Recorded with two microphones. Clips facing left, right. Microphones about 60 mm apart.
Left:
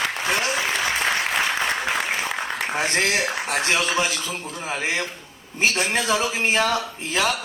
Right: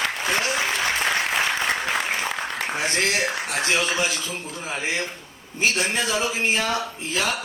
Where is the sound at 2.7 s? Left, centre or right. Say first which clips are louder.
Left 2 dB; left.